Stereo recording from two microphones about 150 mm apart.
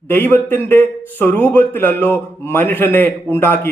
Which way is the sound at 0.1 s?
15° left (ahead or behind).